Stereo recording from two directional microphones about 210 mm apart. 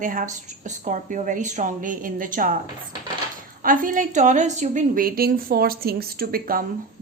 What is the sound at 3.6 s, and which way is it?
A woman's voice, 40° right (ahead or behind).